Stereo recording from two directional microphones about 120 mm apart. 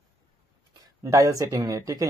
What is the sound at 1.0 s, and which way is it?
Speech, 25° right (ahead or behind).